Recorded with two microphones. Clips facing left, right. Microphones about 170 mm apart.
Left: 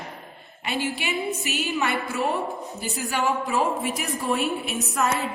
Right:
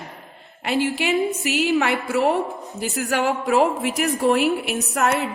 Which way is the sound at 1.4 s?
75° right (ahead or behind).